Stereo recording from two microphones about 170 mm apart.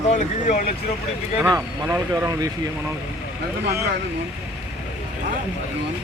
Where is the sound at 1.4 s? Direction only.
15° right (ahead or behind).